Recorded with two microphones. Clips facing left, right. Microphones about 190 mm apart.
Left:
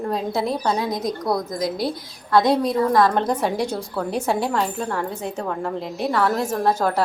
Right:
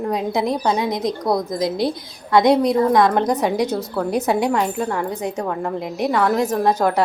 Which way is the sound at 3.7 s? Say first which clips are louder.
Right 4 dB; 5° right (ahead or behind).